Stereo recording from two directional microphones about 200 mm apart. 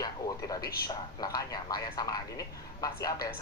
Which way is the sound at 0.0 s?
20° left (ahead or behind).